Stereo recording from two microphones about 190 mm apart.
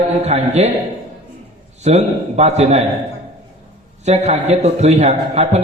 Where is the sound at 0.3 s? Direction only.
35° right (ahead or behind).